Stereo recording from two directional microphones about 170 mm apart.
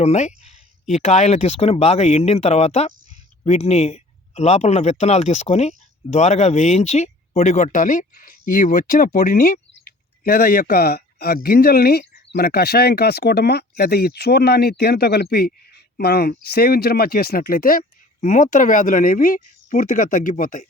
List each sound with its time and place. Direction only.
0.0 s speech: 40° left (ahead or behind)